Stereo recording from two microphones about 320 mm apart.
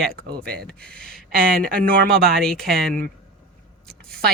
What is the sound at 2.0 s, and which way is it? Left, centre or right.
Speech, right.